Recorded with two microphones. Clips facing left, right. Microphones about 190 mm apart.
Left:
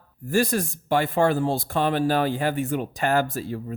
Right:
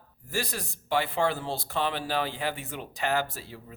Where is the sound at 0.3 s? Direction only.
50° left (ahead or behind).